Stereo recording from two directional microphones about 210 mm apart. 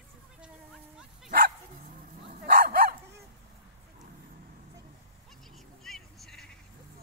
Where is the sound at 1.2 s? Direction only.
45° right (ahead or behind).